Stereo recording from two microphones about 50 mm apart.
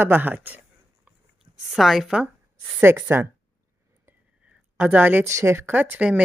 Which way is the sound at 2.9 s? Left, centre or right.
Right.